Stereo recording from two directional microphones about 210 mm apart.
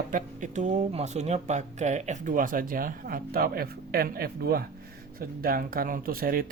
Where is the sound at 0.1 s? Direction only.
35° right (ahead or behind).